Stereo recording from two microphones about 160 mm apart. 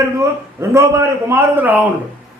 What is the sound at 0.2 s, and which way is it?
A man's voice, 20° right (ahead or behind).